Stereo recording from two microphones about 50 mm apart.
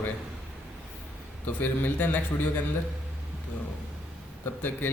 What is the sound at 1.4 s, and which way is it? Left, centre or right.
Speech, left.